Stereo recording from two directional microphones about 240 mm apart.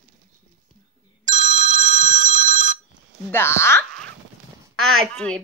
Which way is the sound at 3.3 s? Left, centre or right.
Centre.